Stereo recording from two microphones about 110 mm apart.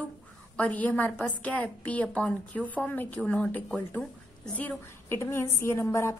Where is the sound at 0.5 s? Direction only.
15° left (ahead or behind).